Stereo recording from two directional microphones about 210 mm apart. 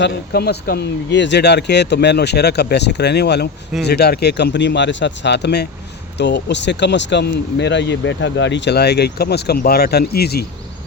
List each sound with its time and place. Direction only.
0.0 s speech: 50° left (ahead or behind)